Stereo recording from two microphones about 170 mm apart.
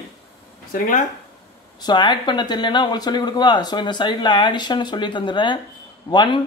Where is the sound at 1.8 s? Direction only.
25° left (ahead or behind).